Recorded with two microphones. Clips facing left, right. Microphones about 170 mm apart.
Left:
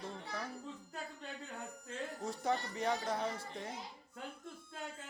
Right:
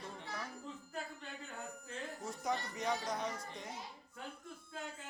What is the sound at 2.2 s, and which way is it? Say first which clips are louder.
Speech: left 3 dB; 30° left (ahead or behind).